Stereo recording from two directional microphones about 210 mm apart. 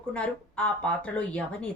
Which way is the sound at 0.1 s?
5° left (ahead or behind).